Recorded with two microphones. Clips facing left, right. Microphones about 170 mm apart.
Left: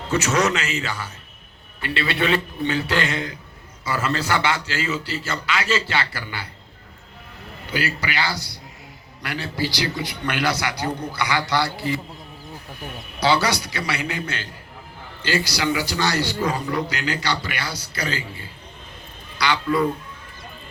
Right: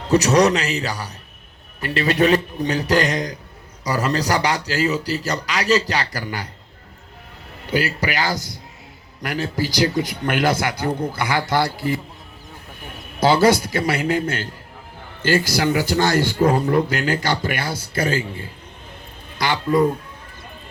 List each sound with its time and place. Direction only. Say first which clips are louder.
0.1 s a man's voice: right 6 dB; 35° right (ahead or behind)
7.7 s a man's voice: right 4 dB; 40° right (ahead or behind)
13.1 s a man's voice: right 6 dB; 50° right (ahead or behind)